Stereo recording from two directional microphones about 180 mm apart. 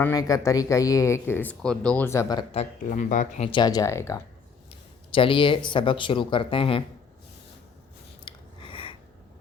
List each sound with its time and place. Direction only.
0.0 s speech: 20° left (ahead or behind)
2.5 s speech: 40° left (ahead or behind)
3.5 s speech: 20° left (ahead or behind)
5.1 s speech: 30° left (ahead or behind)
8.2 s a sound: 30° left (ahead or behind)